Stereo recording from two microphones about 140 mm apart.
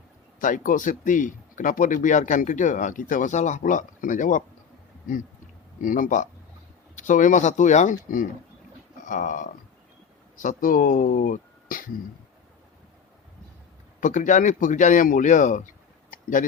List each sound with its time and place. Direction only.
0.3 s speech: 70° left (ahead or behind)
5.8 s speech: 75° left (ahead or behind)
14.0 s speech: 65° left (ahead or behind)
16.1 s a sound: 70° left (ahead or behind)